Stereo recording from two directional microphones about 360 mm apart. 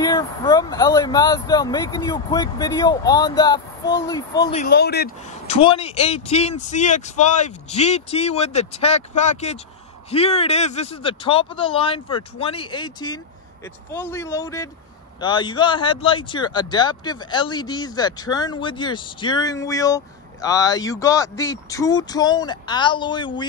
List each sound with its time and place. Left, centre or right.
0.0 s speech: centre
4.6 s speech: left